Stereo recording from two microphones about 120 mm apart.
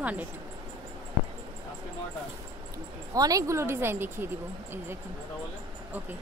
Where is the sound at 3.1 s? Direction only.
30° right (ahead or behind).